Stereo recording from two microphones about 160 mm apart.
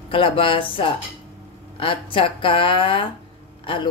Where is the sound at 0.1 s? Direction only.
35° left (ahead or behind).